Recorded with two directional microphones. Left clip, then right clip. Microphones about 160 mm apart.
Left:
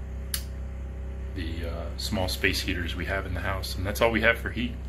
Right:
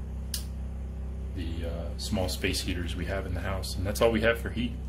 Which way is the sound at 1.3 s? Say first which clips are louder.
Left 2 dB; 20° right (ahead or behind).